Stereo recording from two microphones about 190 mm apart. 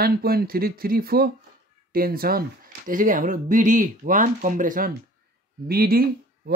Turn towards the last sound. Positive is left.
turn(degrees=-50)  # may be behind; listen again after turning